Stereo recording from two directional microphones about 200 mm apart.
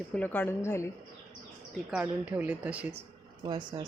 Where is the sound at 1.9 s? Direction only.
10° right (ahead or behind).